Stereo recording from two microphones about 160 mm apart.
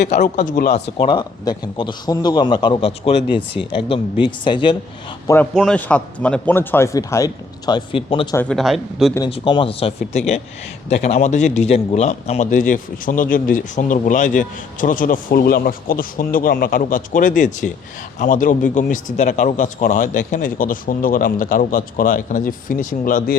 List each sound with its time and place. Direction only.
0.1 s speech: 50° left (ahead or behind)
0.7 s a man's voice: 30° left (ahead or behind)
5.5 s speech: 5° left (ahead or behind); by 8.4 s 35° left (ahead or behind)
8.4 s speech: 5° left (ahead or behind)
9.3 s a man's voice: 30° left (ahead or behind); by 23.4 s 65° left (ahead or behind)